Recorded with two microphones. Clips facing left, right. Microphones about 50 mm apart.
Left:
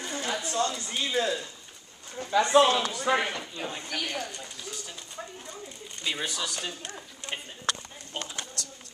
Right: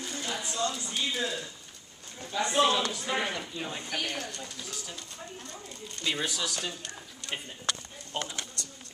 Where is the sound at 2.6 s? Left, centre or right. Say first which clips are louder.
Left 3 dB; centre.